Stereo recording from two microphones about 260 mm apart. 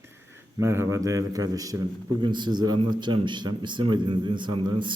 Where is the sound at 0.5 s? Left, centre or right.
Centre.